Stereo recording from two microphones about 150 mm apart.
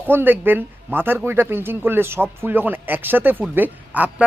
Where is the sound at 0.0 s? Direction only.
15° right (ahead or behind).